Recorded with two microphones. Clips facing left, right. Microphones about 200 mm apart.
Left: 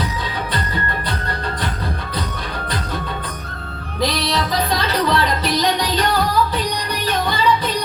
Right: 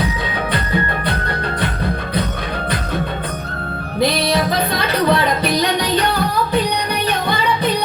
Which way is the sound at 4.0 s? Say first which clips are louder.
Right 4 dB; 60° right (ahead or behind).